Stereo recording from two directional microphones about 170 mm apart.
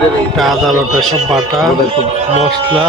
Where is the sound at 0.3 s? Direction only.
Centre (ahead or behind).